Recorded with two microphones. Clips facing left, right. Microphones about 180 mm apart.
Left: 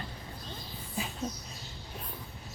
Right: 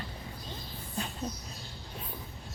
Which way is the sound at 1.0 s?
5° left (ahead or behind).